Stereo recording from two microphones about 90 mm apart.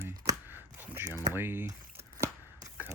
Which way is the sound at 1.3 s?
25° right (ahead or behind).